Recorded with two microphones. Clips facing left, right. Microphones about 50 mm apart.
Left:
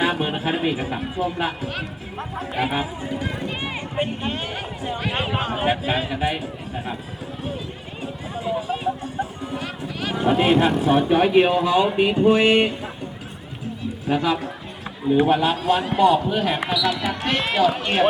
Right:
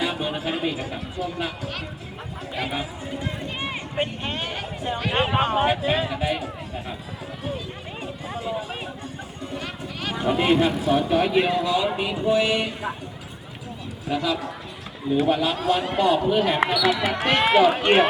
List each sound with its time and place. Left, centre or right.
0.0 s music: left
0.4 s speech: centre
2.7 s speech: left
4.3 s speech: centre
5.2 s speech: centre
5.8 s a man's voice: centre
9.6 s a sound: centre
10.2 s a man's voice: centre
10.6 s speech: left
14.1 s speech: left
15.1 s a man's voice: centre
16.7 s speech: right
17.1 s speech: centre
17.4 s speech: right